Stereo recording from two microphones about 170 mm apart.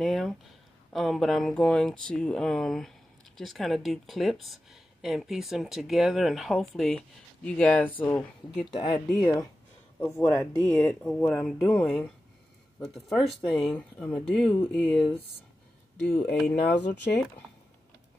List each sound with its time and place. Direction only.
0.0 s a sound: centre (ahead or behind)
0.9 s speech: centre (ahead or behind)
8.6 s speech: 25° left (ahead or behind); by 15.1 s 10° left (ahead or behind)
16.2 s speech: 5° left (ahead or behind)